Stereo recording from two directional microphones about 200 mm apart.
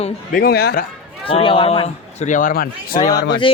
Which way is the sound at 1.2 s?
25° left (ahead or behind).